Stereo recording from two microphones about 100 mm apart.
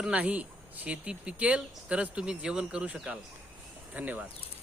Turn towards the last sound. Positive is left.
turn(degrees=-15)  # may be behind; listen again after turning